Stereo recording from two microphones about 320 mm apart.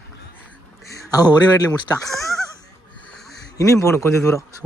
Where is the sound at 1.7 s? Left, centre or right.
Centre.